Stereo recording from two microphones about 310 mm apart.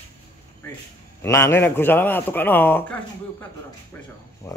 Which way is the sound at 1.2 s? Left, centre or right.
Centre.